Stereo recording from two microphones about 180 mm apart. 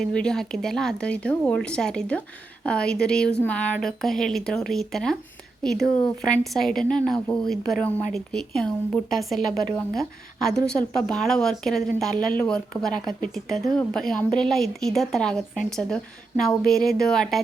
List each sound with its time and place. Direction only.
0.0 s speech: 5° left (ahead or behind)